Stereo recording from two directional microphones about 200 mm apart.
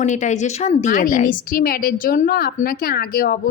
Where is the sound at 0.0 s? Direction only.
35° left (ahead or behind).